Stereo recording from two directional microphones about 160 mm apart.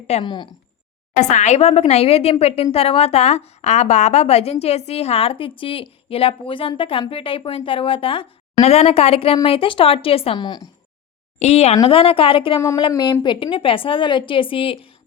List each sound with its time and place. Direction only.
0.1 s speech: 30° left (ahead or behind)
1.1 s a woman's voice: 50° left (ahead or behind); by 10.7 s 25° left (ahead or behind)
11.3 s a woman's voice: 40° left (ahead or behind)
12.5 s a woman's voice: 20° left (ahead or behind); by 14.8 s 35° left (ahead or behind)